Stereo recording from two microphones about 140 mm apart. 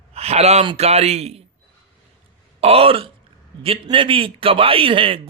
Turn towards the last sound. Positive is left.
turn(degrees=-40)  # may be behind; listen again after turning